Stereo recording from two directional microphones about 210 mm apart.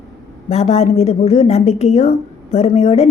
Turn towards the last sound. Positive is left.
turn(degrees=30)  # may be behind; listen again after turning